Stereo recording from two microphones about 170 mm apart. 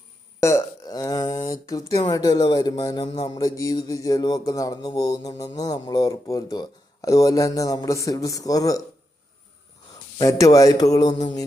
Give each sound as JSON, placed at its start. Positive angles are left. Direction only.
{"t": 0.4, "sound": "a sound", "side_deg": 20}
{"t": 1.6, "sound": "speech", "side_deg": 20}
{"t": 10.2, "sound": "speech", "side_deg": 20}